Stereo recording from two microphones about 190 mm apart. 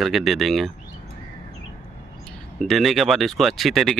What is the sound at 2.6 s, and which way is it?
Speech, centre (ahead or behind).